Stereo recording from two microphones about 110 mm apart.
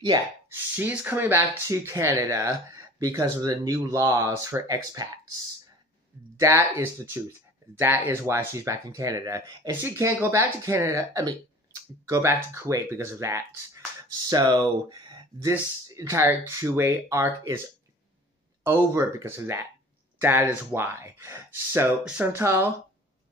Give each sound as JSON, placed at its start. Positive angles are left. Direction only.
{"t": 0.5, "sound": "speech", "side_deg": -15}
{"t": 6.4, "sound": "speech", "side_deg": -20}
{"t": 18.6, "sound": "speech", "side_deg": -25}
{"t": 22.0, "sound": "speech", "side_deg": -10}
{"t": 22.3, "sound": "speech", "side_deg": -25}